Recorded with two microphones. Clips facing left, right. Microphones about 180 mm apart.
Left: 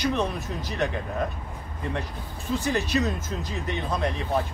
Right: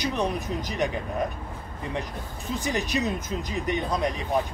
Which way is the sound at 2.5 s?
15° right (ahead or behind).